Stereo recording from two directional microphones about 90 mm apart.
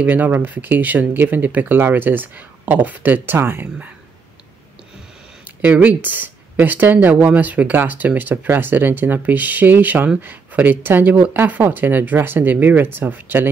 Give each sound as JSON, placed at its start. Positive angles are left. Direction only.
{"t": 0.0, "sound": "speech", "side_deg": -20}
{"t": 5.6, "sound": "speech", "side_deg": -15}